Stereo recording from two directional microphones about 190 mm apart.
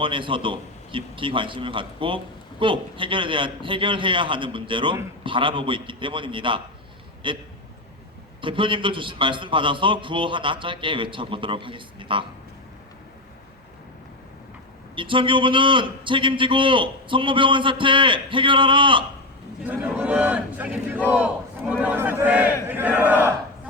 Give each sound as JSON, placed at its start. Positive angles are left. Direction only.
{"t": 0.0, "sound": "a man's voice", "side_deg": -25}
{"t": 14.9, "sound": "a man's voice", "side_deg": -25}
{"t": 20.0, "sound": "speech", "side_deg": -10}